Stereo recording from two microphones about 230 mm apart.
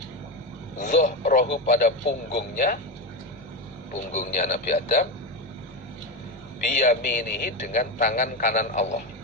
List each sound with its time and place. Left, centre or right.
0.8 s a man's voice: left
2.3 s a man's voice: left
4.1 s a man's voice: left
6.7 s a man's voice: left